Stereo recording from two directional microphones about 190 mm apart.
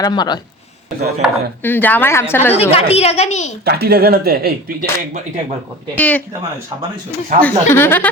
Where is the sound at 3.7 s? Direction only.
55° right (ahead or behind).